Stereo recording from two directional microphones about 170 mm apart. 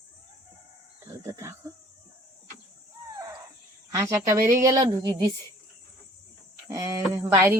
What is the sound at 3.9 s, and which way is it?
Speech, 20° right (ahead or behind).